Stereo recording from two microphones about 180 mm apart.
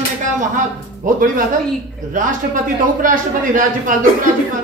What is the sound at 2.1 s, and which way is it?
A man's voice, 50° right (ahead or behind).